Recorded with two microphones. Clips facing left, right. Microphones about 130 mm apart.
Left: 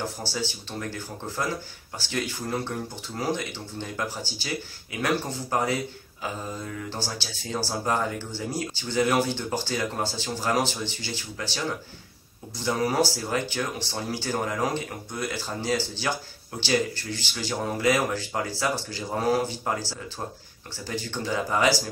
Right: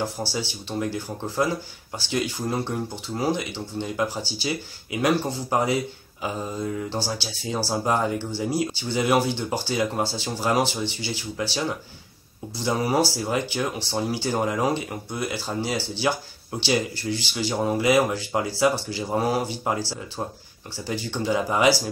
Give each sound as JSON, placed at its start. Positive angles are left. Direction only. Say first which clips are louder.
{"t": 0.3, "sound": "speech", "louder": "right 2 dB", "side_deg": -15}
{"t": 12.6, "sound": "speech", "louder": "right 2 dB", "side_deg": -15}